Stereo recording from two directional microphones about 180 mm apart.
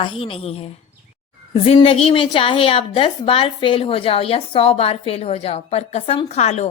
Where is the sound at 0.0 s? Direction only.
30° left (ahead or behind).